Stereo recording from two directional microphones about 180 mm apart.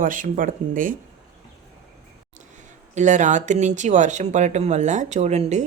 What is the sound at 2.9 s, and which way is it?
Speech, 40° right (ahead or behind).